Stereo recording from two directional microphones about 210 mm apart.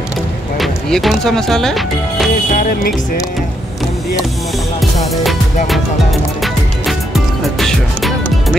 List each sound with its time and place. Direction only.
0.6 s speech: centre (ahead or behind)
2.5 s music: 40° left (ahead or behind)
7.5 s music: centre (ahead or behind)